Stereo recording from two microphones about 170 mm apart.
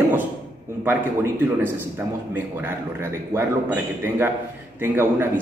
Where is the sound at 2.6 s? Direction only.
15° right (ahead or behind).